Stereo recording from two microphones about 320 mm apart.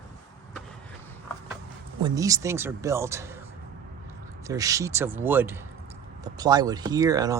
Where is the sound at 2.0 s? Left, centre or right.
Centre.